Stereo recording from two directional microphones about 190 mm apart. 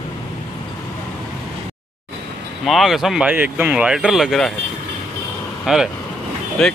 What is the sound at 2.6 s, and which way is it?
Speech, centre (ahead or behind).